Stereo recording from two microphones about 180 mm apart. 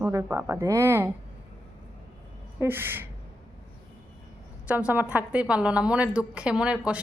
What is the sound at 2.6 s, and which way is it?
Speech, 10° right (ahead or behind).